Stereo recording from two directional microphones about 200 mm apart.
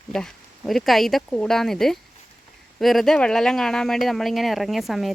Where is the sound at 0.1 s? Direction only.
Centre (ahead or behind).